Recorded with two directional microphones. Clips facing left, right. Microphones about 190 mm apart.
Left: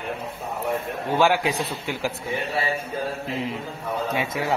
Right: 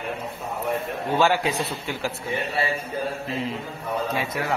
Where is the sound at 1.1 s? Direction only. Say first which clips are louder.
Left 1 dB; 15° left (ahead or behind).